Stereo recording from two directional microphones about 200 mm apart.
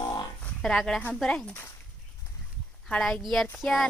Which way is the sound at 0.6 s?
Centre (ahead or behind).